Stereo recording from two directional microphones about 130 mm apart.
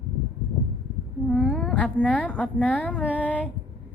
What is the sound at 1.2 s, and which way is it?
A woman's voice, 5° left (ahead or behind).